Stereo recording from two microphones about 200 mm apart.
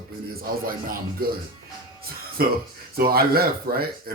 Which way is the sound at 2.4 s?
50° right (ahead or behind).